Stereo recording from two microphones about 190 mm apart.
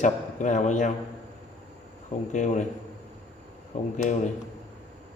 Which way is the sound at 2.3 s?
40° left (ahead or behind).